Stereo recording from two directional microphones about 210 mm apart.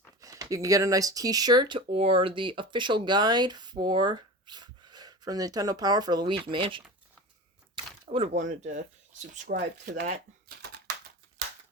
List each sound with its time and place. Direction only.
0.2 s speech: 15° right (ahead or behind)
8.1 s speech: 30° right (ahead or behind); by 10.9 s 45° right (ahead or behind)